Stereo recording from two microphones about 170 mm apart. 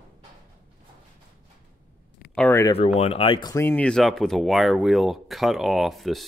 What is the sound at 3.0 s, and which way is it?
Speech, 35° left (ahead or behind).